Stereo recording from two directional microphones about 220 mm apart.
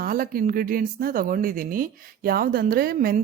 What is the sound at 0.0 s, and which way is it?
A woman's voice, 40° right (ahead or behind).